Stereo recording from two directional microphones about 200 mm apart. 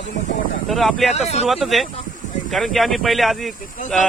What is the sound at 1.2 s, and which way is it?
Speech, 35° left (ahead or behind).